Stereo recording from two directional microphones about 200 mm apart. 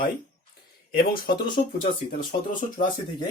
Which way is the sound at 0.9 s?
45° left (ahead or behind).